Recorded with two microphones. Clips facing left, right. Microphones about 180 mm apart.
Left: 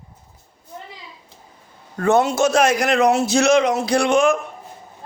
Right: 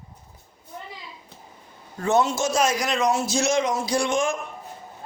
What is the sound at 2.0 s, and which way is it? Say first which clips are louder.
A man's voice: left 5 dB; 60° left (ahead or behind).